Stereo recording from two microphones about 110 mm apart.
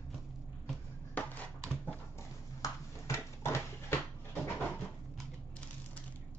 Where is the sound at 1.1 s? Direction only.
15° left (ahead or behind).